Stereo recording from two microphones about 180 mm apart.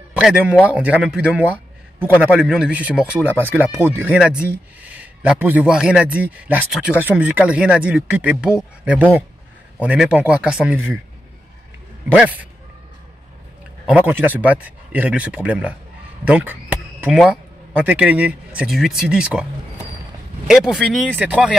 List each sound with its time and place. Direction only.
0.1 s a man's voice: 5° right (ahead or behind)
12.1 s a man's voice: 10° right (ahead or behind)
14.0 s a man's voice: 10° right (ahead or behind)
20.4 s speech: centre (ahead or behind)